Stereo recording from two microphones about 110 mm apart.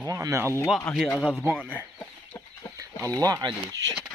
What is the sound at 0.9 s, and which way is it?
Speech, 5° left (ahead or behind).